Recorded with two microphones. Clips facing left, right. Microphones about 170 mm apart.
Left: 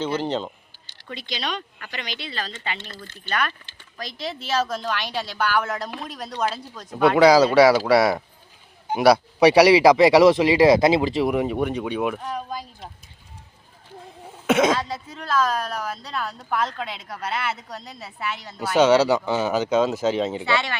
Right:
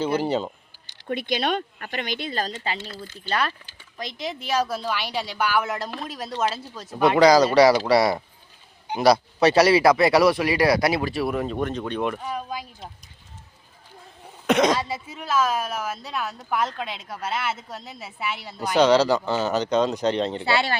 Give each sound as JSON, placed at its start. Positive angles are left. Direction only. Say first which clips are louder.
{"t": 0.0, "sound": "a sound", "louder": "right 2 dB", "side_deg": -10}
{"t": 1.0, "sound": "speech", "louder": "right 6 dB", "side_deg": -55}
{"t": 2.7, "sound": "speech", "louder": "right 3 dB", "side_deg": -10}
{"t": 3.2, "sound": "speech", "louder": "right 1 dB", "side_deg": -30}
{"t": 3.9, "sound": "a woman's voice", "louder": "even", "side_deg": -20}
{"t": 14.4, "sound": "speech", "louder": "left 1 dB", "side_deg": 5}
{"t": 14.8, "sound": "a woman's voice", "louder": "even", "side_deg": -10}
{"t": 18.8, "sound": "speech", "louder": "left 1 dB", "side_deg": 5}
{"t": 20.4, "sound": "speech", "louder": "right 1 dB", "side_deg": -35}